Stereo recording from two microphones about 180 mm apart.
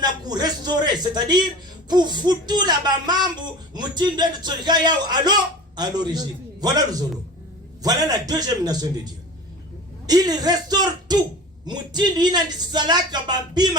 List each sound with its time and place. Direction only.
0.0 s speech: 20° right (ahead or behind)
10.1 s speech: 20° right (ahead or behind)